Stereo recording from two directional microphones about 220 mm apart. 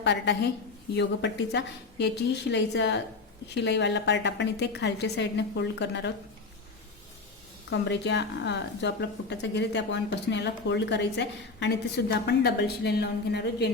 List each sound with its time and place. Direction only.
0.0 s a woman's voice: 50° left (ahead or behind)
7.7 s a woman's voice: 50° left (ahead or behind)